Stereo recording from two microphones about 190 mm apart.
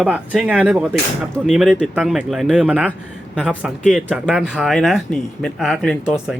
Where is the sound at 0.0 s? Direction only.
5° right (ahead or behind).